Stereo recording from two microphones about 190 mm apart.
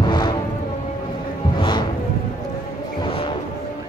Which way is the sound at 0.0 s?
25° left (ahead or behind).